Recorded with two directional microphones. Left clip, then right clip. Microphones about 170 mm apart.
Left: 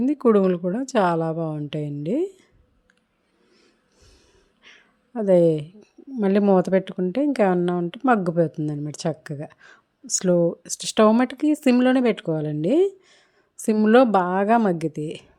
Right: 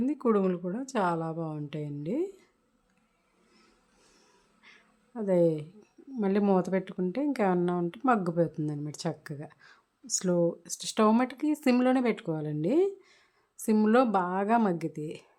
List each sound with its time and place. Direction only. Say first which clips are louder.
0.0 s a woman's voice: left 9 dB; 30° left (ahead or behind)
4.2 s a woman's voice: left 5 dB; 20° left (ahead or behind)